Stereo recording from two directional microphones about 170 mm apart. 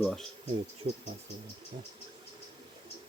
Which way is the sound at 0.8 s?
45° right (ahead or behind).